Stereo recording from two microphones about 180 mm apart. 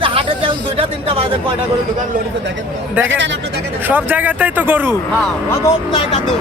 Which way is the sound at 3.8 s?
10° right (ahead or behind).